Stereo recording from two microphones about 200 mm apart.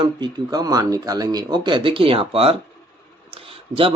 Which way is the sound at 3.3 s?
25° right (ahead or behind).